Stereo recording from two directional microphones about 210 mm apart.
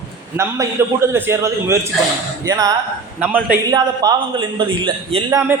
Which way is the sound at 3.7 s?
20° right (ahead or behind).